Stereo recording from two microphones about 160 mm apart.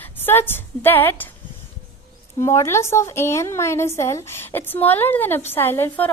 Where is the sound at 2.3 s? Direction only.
15° left (ahead or behind).